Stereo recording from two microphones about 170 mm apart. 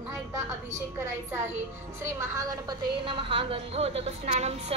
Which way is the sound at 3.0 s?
35° right (ahead or behind).